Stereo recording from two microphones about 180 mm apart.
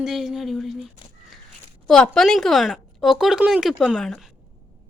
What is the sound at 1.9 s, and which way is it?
A woman's voice, centre (ahead or behind).